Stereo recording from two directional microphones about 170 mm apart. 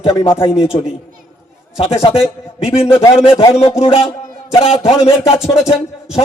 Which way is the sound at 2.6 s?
35° left (ahead or behind).